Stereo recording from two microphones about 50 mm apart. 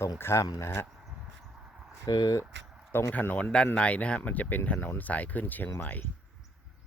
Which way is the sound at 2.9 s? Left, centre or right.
Left.